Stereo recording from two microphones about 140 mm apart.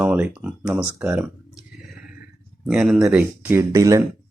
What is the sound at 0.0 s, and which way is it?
Speech, 10° right (ahead or behind).